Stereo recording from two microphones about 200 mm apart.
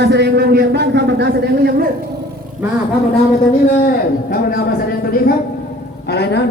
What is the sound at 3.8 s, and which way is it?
Speech, 45° left (ahead or behind).